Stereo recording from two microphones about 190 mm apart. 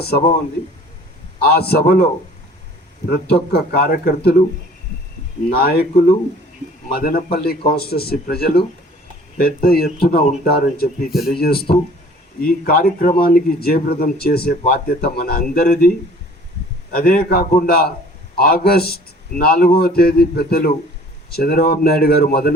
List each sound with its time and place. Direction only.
0.0 s speech: 55° left (ahead or behind)
1.4 s speech: 55° left (ahead or behind)
3.1 s speech: 55° left (ahead or behind)
5.5 s speech: 55° left (ahead or behind)
16.9 s speech: 50° left (ahead or behind)